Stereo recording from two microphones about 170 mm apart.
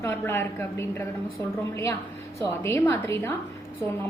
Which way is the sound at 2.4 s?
15° left (ahead or behind).